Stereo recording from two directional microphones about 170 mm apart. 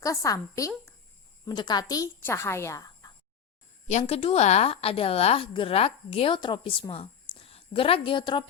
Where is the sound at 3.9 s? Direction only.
40° left (ahead or behind).